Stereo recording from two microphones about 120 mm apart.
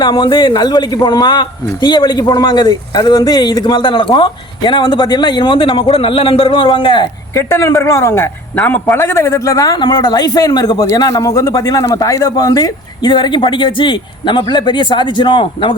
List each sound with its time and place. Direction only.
0.0 s speech: 40° left (ahead or behind)
7.3 s speech: 25° left (ahead or behind); by 15.7 s 40° left (ahead or behind)